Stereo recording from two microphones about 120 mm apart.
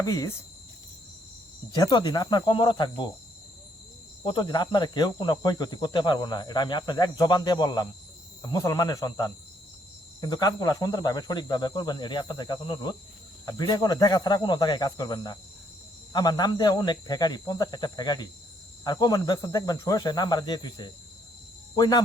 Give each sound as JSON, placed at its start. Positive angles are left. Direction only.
{"t": 0.0, "sound": "speech", "side_deg": 30}
{"t": 1.7, "sound": "speech", "side_deg": 40}
{"t": 4.2, "sound": "speech", "side_deg": 40}